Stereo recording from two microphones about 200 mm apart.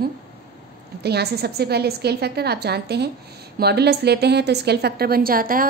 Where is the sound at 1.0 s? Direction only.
55° right (ahead or behind).